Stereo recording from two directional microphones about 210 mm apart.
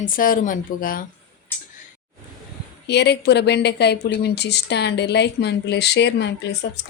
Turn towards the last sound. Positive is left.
turn(degrees=55)  # may be behind; listen again after turning